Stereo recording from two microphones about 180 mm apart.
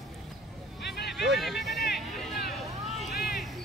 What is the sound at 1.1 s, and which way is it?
Vehicle, centre (ahead or behind).